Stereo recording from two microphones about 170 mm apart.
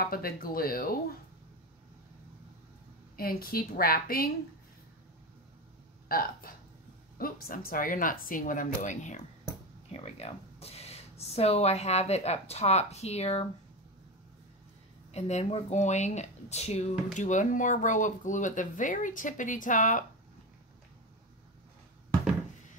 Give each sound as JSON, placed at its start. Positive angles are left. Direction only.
{"t": 0.0, "sound": "a woman's voice", "side_deg": 60}
{"t": 3.2, "sound": "a woman's voice", "side_deg": 60}
{"t": 6.0, "sound": "a woman's voice", "side_deg": 60}
{"t": 15.1, "sound": "speech", "side_deg": 40}